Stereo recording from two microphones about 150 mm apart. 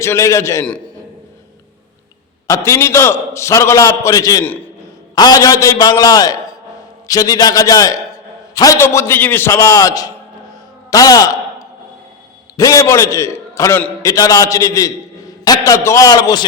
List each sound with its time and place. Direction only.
0.0 s a man's voice: 20° left (ahead or behind)
2.5 s a man's voice: 20° left (ahead or behind)
10.9 s a sound: 25° left (ahead or behind)
12.5 s a man's voice: 25° left (ahead or behind)